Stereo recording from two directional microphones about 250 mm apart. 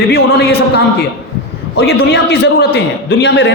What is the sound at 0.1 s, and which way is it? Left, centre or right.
Speech, left.